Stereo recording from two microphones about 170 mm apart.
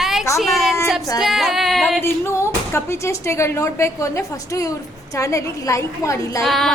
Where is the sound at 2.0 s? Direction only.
15° left (ahead or behind).